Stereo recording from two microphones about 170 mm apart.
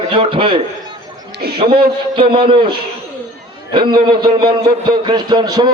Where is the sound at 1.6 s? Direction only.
30° right (ahead or behind).